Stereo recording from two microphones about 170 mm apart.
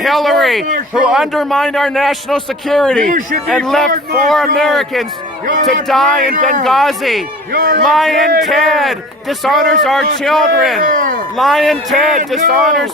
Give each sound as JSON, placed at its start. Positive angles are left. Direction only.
{"t": 0.0, "sound": "a man's voice", "side_deg": 0}
{"t": 3.0, "sound": "speech", "side_deg": -50}
{"t": 3.4, "sound": "a man's voice", "side_deg": 0}
{"t": 3.9, "sound": "speech", "side_deg": -50}
{"t": 4.5, "sound": "a man's voice", "side_deg": 0}
{"t": 6.2, "sound": "speech", "side_deg": -50}
{"t": 6.7, "sound": "a man's voice", "side_deg": 0}
{"t": 7.5, "sound": "a man's voice", "side_deg": -60}
{"t": 7.9, "sound": "a man's voice", "side_deg": 0}
{"t": 10.8, "sound": "speech", "side_deg": -50}
{"t": 11.3, "sound": "a man's voice", "side_deg": 0}